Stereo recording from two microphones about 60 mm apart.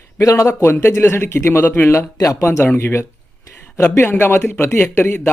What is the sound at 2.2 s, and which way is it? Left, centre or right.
Speech, left.